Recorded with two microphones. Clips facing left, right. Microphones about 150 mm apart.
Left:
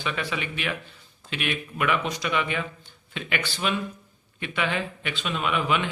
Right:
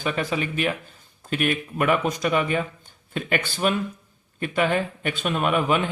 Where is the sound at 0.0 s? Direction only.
45° right (ahead or behind).